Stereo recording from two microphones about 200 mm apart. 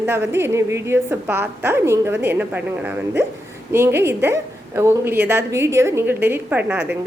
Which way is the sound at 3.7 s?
10° right (ahead or behind).